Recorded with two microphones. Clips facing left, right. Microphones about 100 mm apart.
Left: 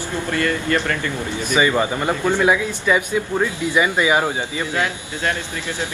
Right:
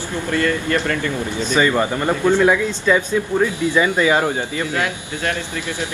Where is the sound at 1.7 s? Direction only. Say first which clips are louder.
Right 1 dB; 10° left (ahead or behind).